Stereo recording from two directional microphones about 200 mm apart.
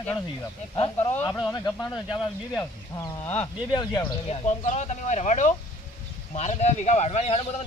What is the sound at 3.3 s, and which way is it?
Speech, 30° left (ahead or behind).